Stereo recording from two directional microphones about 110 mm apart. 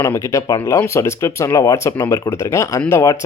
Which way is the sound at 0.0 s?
25° left (ahead or behind).